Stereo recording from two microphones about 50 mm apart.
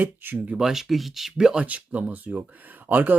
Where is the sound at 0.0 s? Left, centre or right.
Right.